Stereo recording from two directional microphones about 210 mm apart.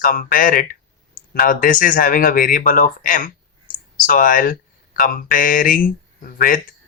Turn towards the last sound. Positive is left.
turn(degrees=40)  # may be behind; listen again after turning